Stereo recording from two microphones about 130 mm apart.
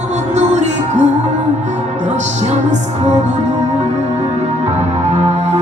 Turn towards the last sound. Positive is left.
turn(degrees=-55)  # may be behind; listen again after turning